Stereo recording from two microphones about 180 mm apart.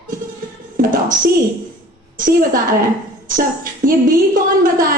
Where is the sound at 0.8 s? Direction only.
50° right (ahead or behind).